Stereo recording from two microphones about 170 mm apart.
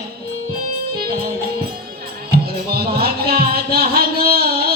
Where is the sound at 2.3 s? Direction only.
65° right (ahead or behind).